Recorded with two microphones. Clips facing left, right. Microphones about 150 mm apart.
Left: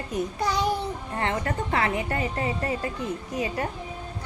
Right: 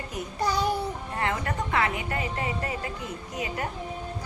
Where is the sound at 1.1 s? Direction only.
30° left (ahead or behind).